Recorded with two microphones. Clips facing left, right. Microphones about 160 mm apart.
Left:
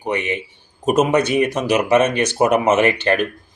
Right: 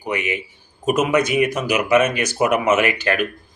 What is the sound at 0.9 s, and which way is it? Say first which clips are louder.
Speech: left 2 dB; 30° left (ahead or behind).